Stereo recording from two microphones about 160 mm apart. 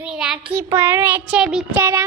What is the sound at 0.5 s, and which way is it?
A child's voice, 15° right (ahead or behind).